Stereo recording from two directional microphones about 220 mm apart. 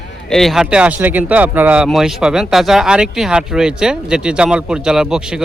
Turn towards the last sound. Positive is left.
turn(degrees=-5)  # may be behind; listen again after turning